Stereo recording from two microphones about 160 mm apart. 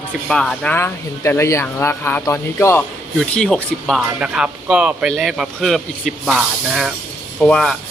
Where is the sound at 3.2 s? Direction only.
5° left (ahead or behind).